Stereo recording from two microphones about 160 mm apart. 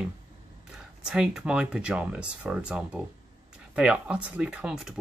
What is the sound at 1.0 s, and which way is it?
Speech, 5° right (ahead or behind).